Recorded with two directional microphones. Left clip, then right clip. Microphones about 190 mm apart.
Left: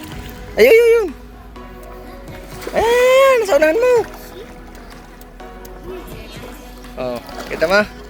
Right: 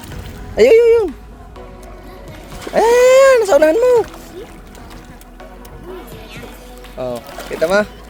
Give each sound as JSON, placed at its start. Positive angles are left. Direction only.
{"t": 0.5, "sound": "speech", "side_deg": 0}
{"t": 2.7, "sound": "a sound", "side_deg": -25}
{"t": 7.0, "sound": "speech", "side_deg": -5}